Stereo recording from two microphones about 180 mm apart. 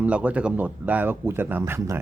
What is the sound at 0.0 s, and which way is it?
Speech, 5° right (ahead or behind).